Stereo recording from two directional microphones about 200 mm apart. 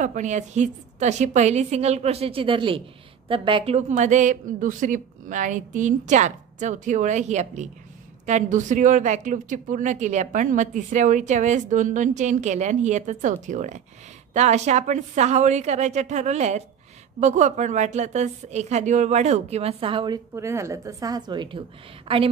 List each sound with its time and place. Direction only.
0.0 s a woman's voice: 40° right (ahead or behind)
20.3 s a woman's voice: 15° right (ahead or behind)